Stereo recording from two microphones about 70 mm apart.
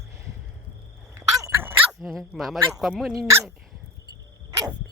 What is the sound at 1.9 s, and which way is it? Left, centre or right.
Speech, centre.